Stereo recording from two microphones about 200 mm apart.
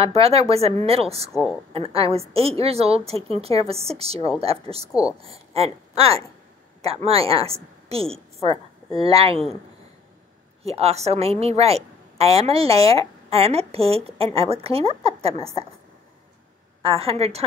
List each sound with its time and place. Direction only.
0.0 s a woman's voice: 30° right (ahead or behind)
1.3 s a woman's voice: centre (ahead or behind)
1.7 s a woman's voice: 30° right (ahead or behind)
10.6 s a woman's voice: 30° right (ahead or behind)
16.8 s a woman's voice: 30° right (ahead or behind)